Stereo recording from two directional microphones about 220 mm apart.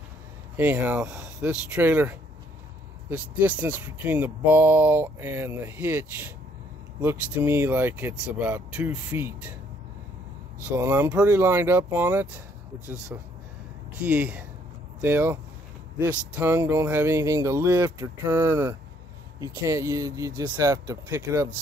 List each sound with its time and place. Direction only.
0.6 s speech: 5° right (ahead or behind)
10.7 s speech: 10° right (ahead or behind)
14.0 s speech: 5° right (ahead or behind)